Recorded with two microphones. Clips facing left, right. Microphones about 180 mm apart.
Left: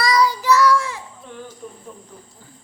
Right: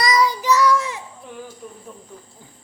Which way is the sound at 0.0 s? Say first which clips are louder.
Left 1 dB; 20° right (ahead or behind).